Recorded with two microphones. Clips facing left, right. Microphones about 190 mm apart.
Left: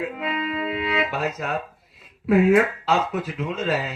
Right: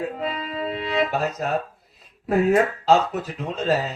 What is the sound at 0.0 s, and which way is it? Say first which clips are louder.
Music: left 1 dB; 40° right (ahead or behind).